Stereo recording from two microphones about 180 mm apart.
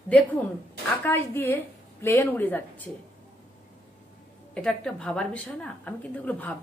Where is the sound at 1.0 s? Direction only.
10° left (ahead or behind).